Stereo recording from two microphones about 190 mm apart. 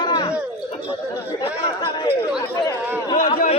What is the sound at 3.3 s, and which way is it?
Speech, 35° left (ahead or behind).